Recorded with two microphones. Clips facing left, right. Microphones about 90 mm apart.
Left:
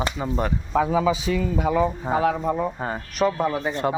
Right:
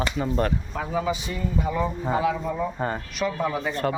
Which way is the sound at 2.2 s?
45° left (ahead or behind).